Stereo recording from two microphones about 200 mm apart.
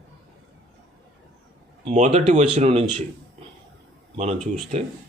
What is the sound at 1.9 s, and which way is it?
Speech, 35° right (ahead or behind).